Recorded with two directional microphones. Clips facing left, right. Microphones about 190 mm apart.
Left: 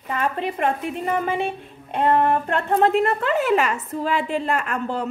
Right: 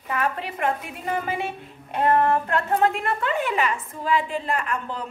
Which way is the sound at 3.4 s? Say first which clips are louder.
Left 5 dB; 40° left (ahead or behind).